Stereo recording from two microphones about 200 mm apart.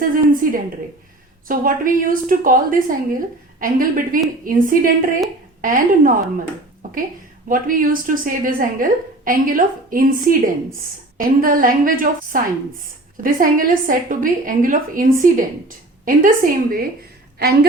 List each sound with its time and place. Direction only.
0.0 s a sound: 45° right (ahead or behind)
1.5 s a woman's voice: 45° right (ahead or behind)
7.4 s a woman's voice: 45° right (ahead or behind)